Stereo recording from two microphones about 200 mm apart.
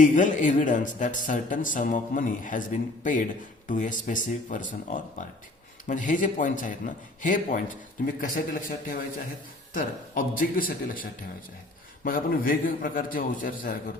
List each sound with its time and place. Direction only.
0.0 s a man's voice: 40° left (ahead or behind)
9.7 s a man's voice: 45° left (ahead or behind)